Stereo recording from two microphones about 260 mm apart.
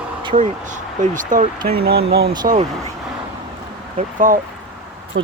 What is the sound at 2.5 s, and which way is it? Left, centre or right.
Speech, right.